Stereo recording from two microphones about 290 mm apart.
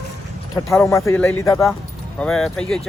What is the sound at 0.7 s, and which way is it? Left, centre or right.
Speech, centre.